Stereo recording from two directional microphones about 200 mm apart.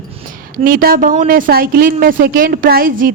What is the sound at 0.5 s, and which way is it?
A woman's voice, 45° right (ahead or behind).